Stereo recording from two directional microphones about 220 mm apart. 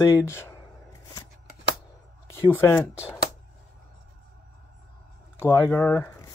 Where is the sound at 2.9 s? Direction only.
5° right (ahead or behind).